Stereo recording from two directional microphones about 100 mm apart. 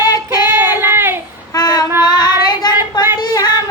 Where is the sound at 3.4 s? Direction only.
25° right (ahead or behind).